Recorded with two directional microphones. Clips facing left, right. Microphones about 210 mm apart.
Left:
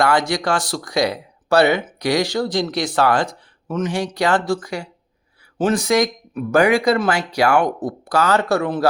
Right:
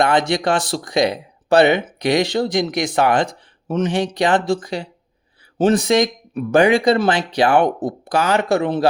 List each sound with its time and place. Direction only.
0.0 s speech: 20° right (ahead or behind)